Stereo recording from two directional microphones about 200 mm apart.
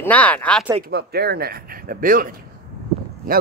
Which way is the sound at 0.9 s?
55° right (ahead or behind).